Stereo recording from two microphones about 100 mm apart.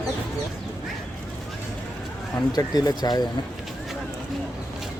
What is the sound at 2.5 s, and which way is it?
Speech, 40° left (ahead or behind).